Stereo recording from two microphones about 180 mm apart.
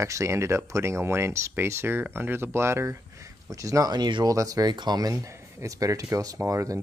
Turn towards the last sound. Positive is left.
turn(degrees=-15)  # may be behind; listen again after turning